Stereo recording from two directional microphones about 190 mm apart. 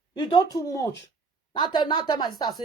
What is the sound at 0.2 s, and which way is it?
Speech, 20° left (ahead or behind).